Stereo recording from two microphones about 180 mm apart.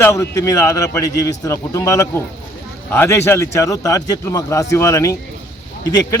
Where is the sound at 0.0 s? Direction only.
15° left (ahead or behind).